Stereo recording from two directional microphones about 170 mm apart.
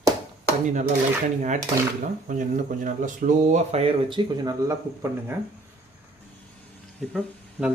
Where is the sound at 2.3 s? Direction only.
50° right (ahead or behind).